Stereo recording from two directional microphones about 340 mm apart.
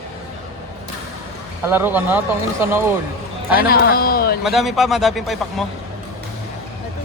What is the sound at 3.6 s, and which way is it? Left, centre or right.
Speech, left.